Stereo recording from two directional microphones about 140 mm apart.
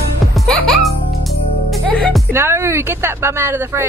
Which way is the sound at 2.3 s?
20° right (ahead or behind).